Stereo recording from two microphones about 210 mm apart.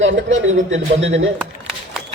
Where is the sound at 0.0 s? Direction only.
65° right (ahead or behind).